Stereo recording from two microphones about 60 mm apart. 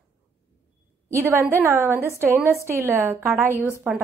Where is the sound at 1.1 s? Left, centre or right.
Right.